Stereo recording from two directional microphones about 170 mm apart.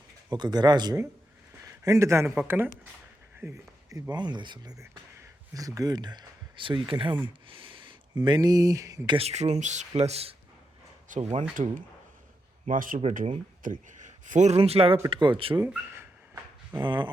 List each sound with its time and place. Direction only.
0.3 s a man's voice: 25° right (ahead or behind)
9.1 s speech: 40° right (ahead or behind)
11.5 s speech: 50° right (ahead or behind); by 15.6 s 30° right (ahead or behind)
15.6 s dog: 15° right (ahead or behind)
16.8 s speech: 30° right (ahead or behind)